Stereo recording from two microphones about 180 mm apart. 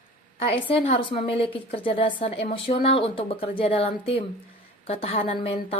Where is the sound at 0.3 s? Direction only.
30° left (ahead or behind).